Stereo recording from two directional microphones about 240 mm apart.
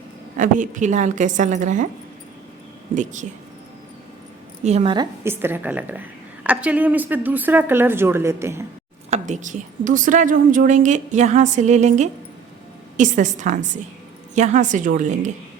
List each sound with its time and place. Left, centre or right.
0.3 s a woman's voice: right
2.9 s a woman's voice: right
4.6 s a woman's voice: right
5.2 s a woman's voice: centre
9.0 s a woman's voice: right